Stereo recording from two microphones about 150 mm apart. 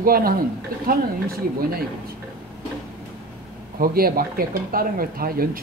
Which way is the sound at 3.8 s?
75° right (ahead or behind).